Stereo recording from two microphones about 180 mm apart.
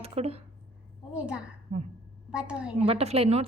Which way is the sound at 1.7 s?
40° right (ahead or behind).